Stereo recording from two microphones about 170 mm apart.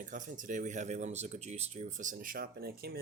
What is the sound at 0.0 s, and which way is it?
Speech, 50° right (ahead or behind).